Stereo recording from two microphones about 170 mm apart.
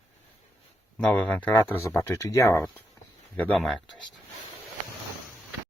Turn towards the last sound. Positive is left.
turn(degrees=0)  # may be behind; listen again after turning